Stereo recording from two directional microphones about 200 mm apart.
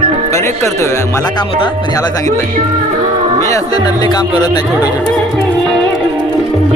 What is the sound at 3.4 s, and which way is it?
Speech, 15° left (ahead or behind).